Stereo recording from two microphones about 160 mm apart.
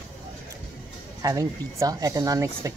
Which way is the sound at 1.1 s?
20° right (ahead or behind).